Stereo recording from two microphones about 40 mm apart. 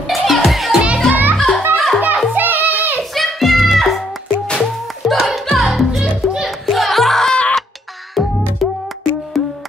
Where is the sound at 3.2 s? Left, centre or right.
Centre.